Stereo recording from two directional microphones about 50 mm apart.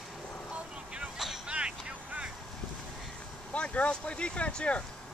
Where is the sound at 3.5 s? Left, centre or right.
Left.